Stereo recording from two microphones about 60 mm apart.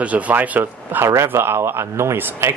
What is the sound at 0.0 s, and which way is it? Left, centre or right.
Speech, right.